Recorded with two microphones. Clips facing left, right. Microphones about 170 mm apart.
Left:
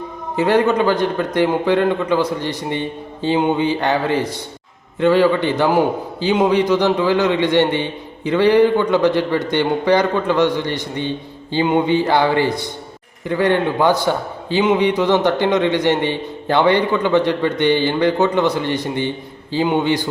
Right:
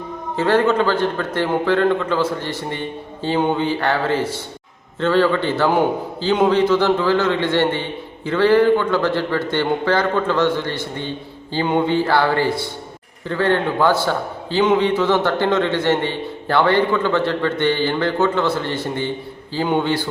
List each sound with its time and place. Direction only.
0.3 s a man's voice: 15° left (ahead or behind)